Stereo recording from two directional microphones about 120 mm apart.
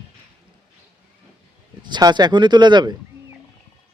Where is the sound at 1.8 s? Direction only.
40° right (ahead or behind).